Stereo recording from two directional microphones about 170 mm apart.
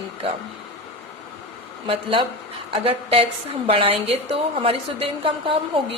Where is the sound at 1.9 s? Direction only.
30° right (ahead or behind).